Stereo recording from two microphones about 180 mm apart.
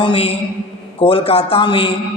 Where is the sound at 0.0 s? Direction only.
30° left (ahead or behind).